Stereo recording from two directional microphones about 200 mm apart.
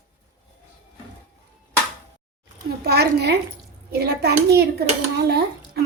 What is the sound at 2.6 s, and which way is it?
A woman's voice, 55° right (ahead or behind).